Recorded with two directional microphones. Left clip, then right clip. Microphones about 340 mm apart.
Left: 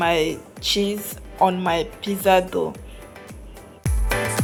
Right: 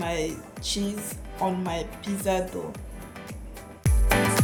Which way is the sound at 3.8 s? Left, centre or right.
Centre.